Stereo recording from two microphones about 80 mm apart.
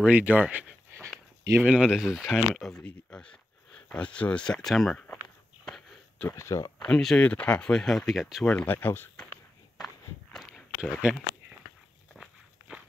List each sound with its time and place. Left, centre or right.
0.0 s speech: centre
1.6 s speech: centre
2.8 s speech: centre
6.2 s speech: left
7.0 s speech: centre
7.2 s speech: centre
8.5 s speech: centre
8.7 s speech: left
10.3 s walk: centre
10.8 s speech: centre